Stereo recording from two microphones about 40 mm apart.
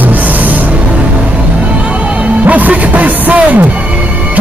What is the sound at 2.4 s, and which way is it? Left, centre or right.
Music, right.